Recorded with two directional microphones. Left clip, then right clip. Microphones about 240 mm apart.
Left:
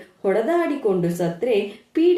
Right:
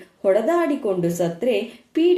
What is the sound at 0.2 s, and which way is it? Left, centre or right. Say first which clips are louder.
A woman's voice: right 2 dB; right.